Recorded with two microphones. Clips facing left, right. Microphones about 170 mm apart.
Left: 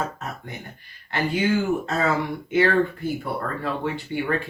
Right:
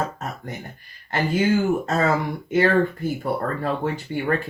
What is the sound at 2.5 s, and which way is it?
Speech, 40° right (ahead or behind).